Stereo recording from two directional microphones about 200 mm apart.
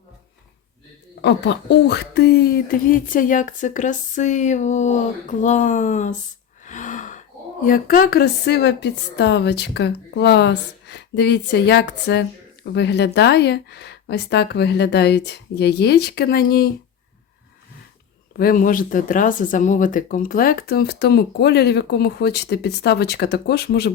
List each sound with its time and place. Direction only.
1.2 s speech: 55° left (ahead or behind)
18.3 s speech: 45° left (ahead or behind)